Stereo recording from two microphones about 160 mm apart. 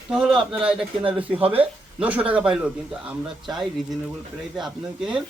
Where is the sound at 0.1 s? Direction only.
5° right (ahead or behind).